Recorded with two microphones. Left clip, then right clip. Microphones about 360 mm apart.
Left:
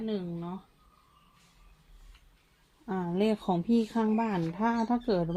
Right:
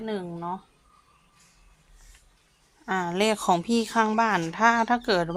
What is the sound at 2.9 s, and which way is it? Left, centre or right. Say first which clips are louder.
A woman's voice: right 6 dB; right.